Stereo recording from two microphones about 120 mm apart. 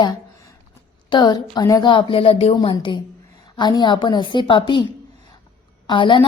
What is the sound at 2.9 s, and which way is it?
A woman's voice, 40° left (ahead or behind).